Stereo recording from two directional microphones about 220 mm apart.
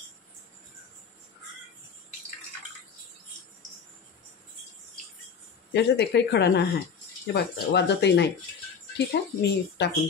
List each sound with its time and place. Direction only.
5.7 s speech: 50° left (ahead or behind)